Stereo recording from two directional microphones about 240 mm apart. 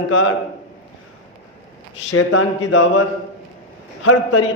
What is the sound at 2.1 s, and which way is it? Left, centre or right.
Speech, left.